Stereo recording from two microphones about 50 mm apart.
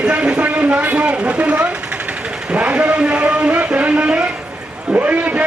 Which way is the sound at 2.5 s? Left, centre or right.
Right.